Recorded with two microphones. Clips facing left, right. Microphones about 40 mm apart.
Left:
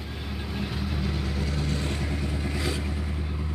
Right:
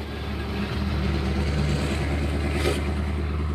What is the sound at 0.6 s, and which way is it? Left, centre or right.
Vehicle, right.